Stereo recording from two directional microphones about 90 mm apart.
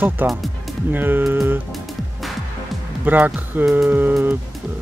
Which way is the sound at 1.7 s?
Centre (ahead or behind).